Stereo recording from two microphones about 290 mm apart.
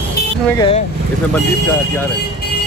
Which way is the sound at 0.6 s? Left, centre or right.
Left.